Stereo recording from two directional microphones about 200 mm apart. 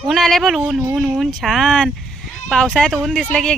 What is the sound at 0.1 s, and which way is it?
Speech, centre (ahead or behind).